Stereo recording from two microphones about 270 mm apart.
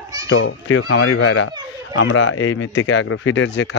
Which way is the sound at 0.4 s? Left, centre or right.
Left.